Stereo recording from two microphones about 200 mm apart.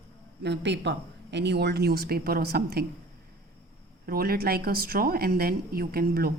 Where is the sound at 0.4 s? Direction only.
60° right (ahead or behind).